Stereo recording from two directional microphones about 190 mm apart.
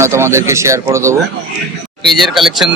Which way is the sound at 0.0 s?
15° right (ahead or behind).